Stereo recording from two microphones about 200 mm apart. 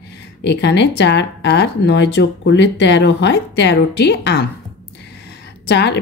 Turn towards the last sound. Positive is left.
turn(degrees=55)  # may be behind; listen again after turning